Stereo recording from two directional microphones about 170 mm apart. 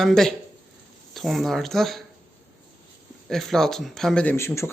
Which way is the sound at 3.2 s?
Centre (ahead or behind).